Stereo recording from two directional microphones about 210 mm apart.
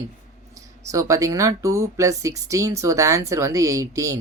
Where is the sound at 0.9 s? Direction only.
15° right (ahead or behind).